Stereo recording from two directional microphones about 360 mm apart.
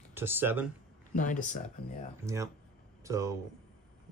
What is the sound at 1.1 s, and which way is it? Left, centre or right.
Speech, left.